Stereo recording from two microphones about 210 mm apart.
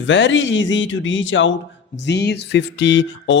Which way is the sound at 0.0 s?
60° left (ahead or behind).